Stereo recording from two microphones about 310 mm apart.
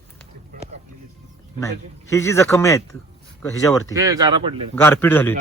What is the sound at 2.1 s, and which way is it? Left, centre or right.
Speech, centre.